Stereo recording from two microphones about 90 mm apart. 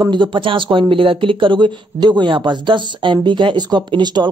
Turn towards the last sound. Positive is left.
turn(degrees=-55)  # may be behind; listen again after turning